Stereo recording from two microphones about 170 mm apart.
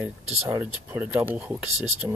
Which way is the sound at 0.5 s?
10° right (ahead or behind).